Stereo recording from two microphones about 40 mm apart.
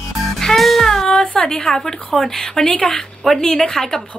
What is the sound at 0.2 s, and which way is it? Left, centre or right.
Music, centre.